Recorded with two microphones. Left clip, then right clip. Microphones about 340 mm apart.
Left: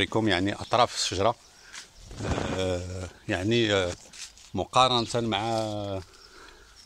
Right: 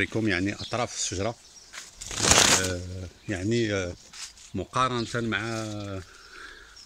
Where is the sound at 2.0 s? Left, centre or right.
Right.